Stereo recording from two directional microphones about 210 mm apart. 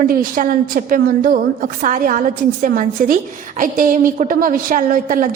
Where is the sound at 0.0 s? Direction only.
40° right (ahead or behind).